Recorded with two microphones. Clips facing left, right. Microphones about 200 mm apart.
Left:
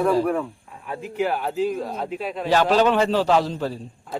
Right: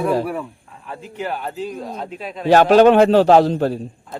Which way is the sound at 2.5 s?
55° right (ahead or behind).